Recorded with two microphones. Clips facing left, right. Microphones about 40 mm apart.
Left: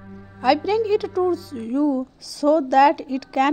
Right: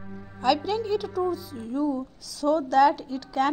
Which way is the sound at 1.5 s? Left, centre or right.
Left.